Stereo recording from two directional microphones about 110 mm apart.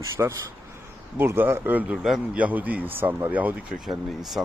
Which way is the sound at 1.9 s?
5° right (ahead or behind).